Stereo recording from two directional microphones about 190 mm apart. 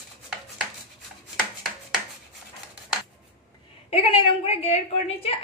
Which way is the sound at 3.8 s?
30° left (ahead or behind).